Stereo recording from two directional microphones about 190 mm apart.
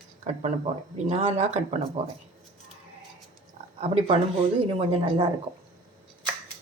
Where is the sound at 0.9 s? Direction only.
35° right (ahead or behind).